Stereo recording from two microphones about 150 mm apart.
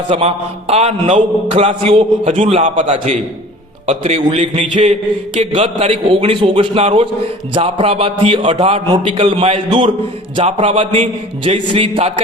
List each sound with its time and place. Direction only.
0.1 s a man's voice: 40° right (ahead or behind)
2.8 s a man's voice: 40° right (ahead or behind)
9.6 s a man's voice: 35° right (ahead or behind)